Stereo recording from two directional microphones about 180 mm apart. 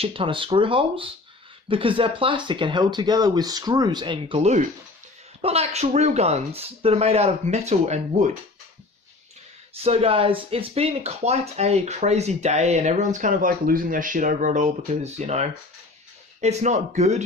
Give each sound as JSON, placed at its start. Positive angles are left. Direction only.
{"t": 0.0, "sound": "speech", "side_deg": -30}
{"t": 9.8, "sound": "speech", "side_deg": -35}